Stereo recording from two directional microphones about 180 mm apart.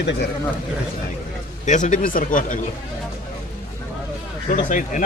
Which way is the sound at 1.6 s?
45° left (ahead or behind).